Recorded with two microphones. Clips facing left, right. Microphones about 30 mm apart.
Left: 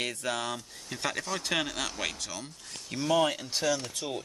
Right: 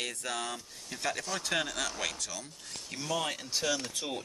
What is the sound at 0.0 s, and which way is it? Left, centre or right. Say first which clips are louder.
Speech: left 4 dB; left.